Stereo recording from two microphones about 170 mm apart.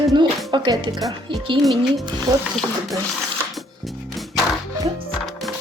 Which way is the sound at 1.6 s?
Centre (ahead or behind).